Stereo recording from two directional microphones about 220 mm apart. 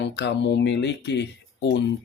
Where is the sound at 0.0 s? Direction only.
50° left (ahead or behind).